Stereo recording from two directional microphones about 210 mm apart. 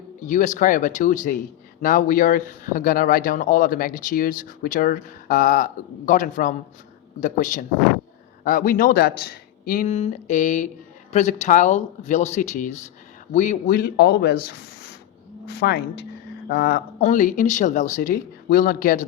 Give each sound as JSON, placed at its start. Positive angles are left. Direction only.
{"t": 0.3, "sound": "speech", "side_deg": 35}
{"t": 17.0, "sound": "speech", "side_deg": 40}